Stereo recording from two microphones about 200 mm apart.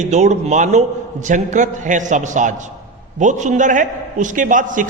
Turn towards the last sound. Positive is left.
turn(degrees=-40)  # may be behind; listen again after turning